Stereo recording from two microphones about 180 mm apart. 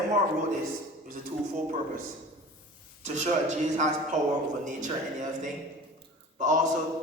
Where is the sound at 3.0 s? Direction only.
40° right (ahead or behind).